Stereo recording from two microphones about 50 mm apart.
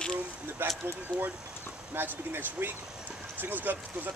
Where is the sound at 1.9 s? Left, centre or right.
Right.